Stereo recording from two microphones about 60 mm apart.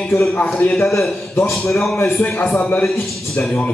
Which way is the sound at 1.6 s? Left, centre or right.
Centre.